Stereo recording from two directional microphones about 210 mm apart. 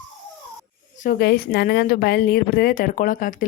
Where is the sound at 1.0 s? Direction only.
45° left (ahead or behind).